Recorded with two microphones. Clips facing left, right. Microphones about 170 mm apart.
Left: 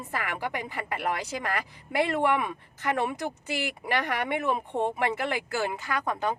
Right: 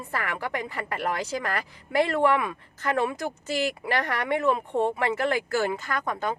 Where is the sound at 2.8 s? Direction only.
15° left (ahead or behind).